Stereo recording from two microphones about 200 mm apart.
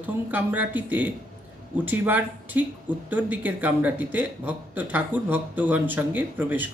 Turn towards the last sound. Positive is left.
turn(degrees=-10)  # may be behind; listen again after turning